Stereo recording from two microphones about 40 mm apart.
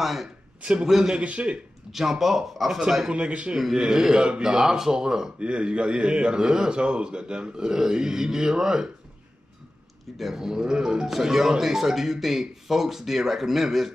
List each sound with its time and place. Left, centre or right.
0.0 s speech: centre
0.6 s a man's voice: right
0.8 s a man's voice: centre
1.1 s a man's voice: right
1.9 s a man's voice: centre
3.1 s a man's voice: right
3.5 s a man's voice: centre
10.1 s a man's voice: centre